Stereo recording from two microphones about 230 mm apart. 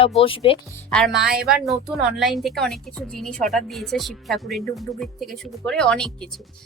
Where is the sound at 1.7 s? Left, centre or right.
Centre.